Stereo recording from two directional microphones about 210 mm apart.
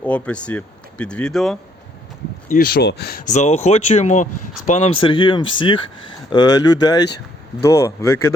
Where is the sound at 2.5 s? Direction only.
45° left (ahead or behind); by 8.3 s 15° left (ahead or behind).